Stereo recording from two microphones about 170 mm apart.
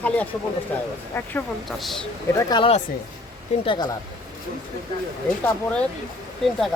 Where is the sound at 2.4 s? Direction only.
25° left (ahead or behind).